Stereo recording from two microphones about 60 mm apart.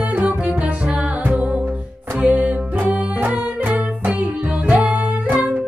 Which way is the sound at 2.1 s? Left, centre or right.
Right.